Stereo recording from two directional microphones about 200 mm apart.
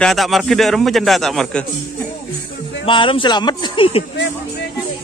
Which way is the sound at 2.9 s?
25° left (ahead or behind).